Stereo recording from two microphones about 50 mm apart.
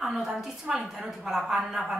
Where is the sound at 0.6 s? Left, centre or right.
Centre.